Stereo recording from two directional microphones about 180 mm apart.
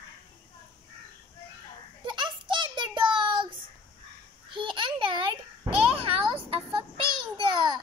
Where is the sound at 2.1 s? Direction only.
25° right (ahead or behind).